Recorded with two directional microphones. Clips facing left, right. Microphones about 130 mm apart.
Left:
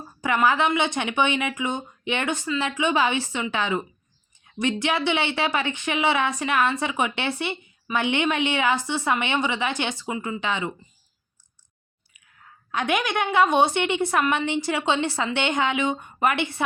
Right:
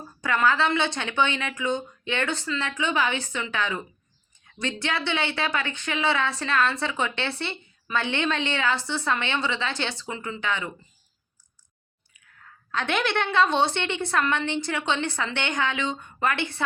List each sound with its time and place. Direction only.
0.2 s speech: 15° left (ahead or behind)
12.4 s a woman's voice: 15° left (ahead or behind)